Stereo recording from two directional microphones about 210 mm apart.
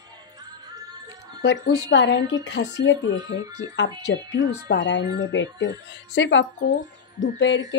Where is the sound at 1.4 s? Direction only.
55° left (ahead or behind).